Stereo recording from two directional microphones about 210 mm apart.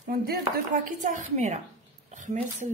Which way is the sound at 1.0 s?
35° right (ahead or behind).